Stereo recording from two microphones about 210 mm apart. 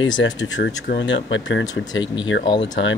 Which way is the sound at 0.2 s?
60° left (ahead or behind).